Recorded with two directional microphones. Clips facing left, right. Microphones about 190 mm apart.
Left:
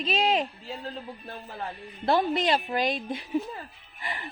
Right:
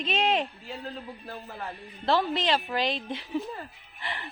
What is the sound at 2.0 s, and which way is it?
A woman's voice, 15° left (ahead or behind).